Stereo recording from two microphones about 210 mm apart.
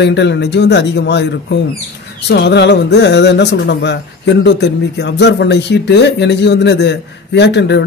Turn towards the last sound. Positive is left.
turn(degrees=55)  # may be behind; listen again after turning